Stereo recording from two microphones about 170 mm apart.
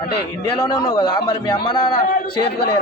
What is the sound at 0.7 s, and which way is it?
A man's voice, 30° left (ahead or behind).